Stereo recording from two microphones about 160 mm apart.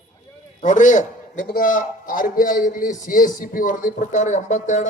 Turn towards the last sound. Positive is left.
turn(degrees=50)  # may be behind; listen again after turning